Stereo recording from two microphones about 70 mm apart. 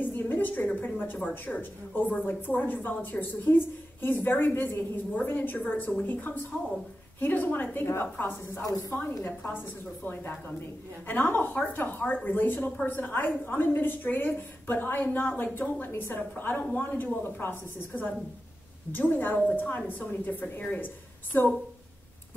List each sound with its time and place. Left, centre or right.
0.0 s a woman's voice: left
8.5 s speech: left
9.2 s a woman's voice: left
11.1 s a woman's voice: left